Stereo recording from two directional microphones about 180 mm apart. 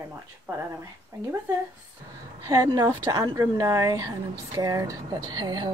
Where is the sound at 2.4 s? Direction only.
20° right (ahead or behind).